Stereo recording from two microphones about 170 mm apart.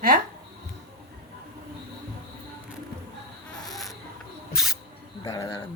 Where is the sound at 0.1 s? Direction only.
55° right (ahead or behind).